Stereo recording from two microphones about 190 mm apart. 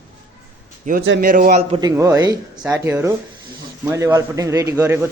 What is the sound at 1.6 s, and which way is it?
Speech, 30° right (ahead or behind).